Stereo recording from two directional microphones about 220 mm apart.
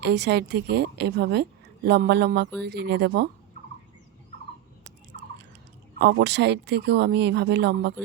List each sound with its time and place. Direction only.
0.0 s a woman's voice: 50° right (ahead or behind)
6.0 s a woman's voice: 50° right (ahead or behind)